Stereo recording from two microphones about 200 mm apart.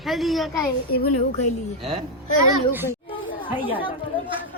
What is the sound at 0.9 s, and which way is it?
Speech, 50° left (ahead or behind).